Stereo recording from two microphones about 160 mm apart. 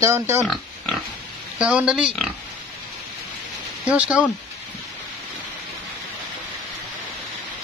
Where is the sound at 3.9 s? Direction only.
10° right (ahead or behind).